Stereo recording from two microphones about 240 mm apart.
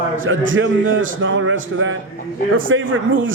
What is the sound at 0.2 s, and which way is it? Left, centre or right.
A man's voice, right.